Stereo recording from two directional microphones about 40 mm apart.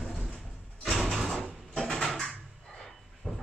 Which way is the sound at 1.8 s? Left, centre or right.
Centre.